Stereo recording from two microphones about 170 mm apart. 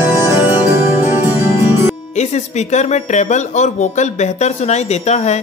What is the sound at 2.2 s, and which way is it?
Speech, 40° left (ahead or behind).